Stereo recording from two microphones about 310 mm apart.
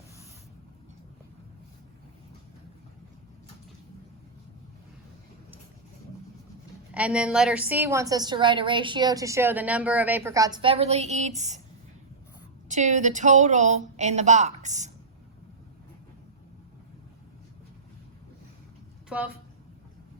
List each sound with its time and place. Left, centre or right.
6.9 s a woman's voice: centre; by 11.6 s right
12.6 s speech: right
19.0 s a sound: centre